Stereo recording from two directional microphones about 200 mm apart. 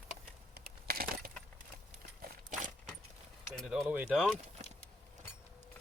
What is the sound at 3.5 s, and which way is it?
Speech, centre (ahead or behind).